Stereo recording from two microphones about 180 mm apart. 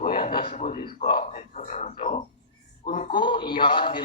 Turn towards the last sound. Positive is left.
turn(degrees=30)  # may be behind; listen again after turning